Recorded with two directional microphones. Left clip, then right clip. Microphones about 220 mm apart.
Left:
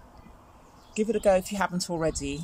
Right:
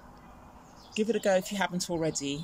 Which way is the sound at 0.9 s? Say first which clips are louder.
Left 3 dB; 5° left (ahead or behind).